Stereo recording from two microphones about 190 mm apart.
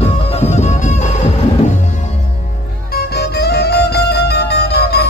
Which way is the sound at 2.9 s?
55° left (ahead or behind).